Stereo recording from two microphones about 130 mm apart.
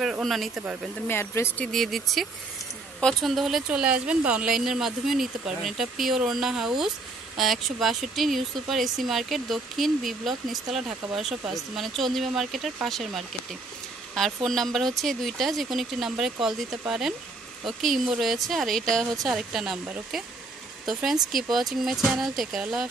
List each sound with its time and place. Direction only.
0.0 s speech: centre (ahead or behind)
1.0 s speech: 15° left (ahead or behind)
1.7 s speech: centre (ahead or behind)